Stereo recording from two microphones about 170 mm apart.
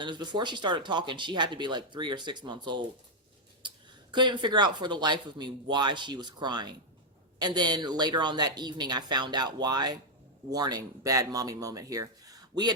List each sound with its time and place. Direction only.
0.0 s speech: 25° right (ahead or behind)
3.6 s a sound: 30° right (ahead or behind)
4.1 s speech: 25° right (ahead or behind)